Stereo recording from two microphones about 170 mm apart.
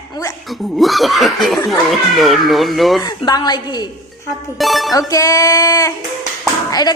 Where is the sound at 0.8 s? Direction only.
Centre (ahead or behind).